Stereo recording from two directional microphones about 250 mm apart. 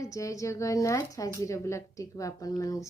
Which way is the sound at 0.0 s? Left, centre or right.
Centre.